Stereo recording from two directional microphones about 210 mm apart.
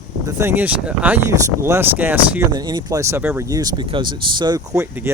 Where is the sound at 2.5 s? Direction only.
20° right (ahead or behind).